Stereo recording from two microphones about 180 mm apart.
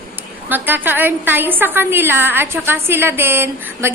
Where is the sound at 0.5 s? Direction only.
10° right (ahead or behind).